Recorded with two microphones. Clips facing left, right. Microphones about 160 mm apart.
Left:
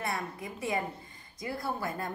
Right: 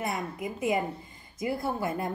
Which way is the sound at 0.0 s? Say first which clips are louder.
Right 3 dB; 20° right (ahead or behind).